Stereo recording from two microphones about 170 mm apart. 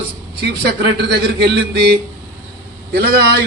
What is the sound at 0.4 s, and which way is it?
A man's voice, 75° right (ahead or behind).